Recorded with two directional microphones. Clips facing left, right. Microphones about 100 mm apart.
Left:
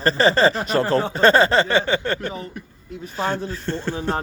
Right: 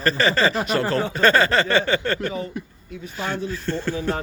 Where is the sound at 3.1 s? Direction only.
35° left (ahead or behind).